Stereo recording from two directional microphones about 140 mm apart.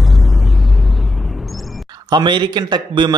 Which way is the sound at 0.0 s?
Centre (ahead or behind).